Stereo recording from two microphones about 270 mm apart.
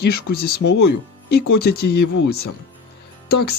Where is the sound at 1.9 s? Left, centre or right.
Left.